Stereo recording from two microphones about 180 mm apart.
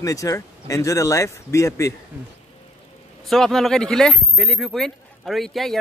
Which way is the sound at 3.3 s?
Centre (ahead or behind).